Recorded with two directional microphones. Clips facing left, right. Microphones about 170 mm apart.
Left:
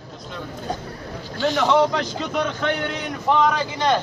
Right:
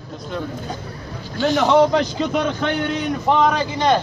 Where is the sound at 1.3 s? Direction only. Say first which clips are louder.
Right 3 dB; 15° right (ahead or behind).